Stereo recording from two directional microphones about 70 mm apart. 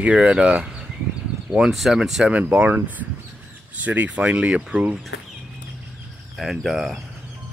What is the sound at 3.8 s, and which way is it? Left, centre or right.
Speech, right.